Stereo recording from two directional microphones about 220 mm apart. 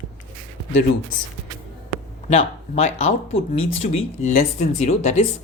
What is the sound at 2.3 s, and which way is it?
Speech, 30° left (ahead or behind).